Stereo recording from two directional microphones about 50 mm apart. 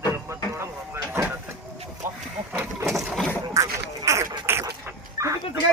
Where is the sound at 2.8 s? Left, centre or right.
Centre.